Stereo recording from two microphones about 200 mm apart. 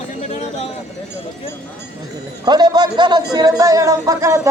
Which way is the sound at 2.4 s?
20° right (ahead or behind).